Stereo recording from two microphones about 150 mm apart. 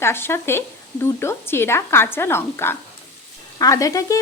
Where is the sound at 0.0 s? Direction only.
15° left (ahead or behind).